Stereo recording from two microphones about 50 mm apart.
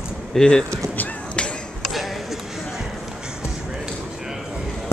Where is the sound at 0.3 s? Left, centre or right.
Centre.